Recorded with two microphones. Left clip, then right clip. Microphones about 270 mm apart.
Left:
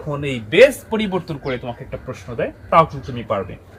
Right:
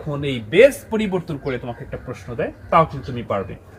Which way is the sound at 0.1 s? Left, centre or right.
Centre.